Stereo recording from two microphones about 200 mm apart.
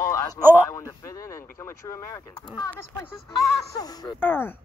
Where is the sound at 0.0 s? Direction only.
15° left (ahead or behind).